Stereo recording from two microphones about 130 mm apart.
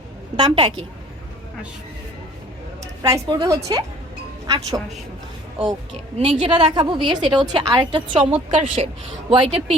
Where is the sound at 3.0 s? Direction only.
25° right (ahead or behind).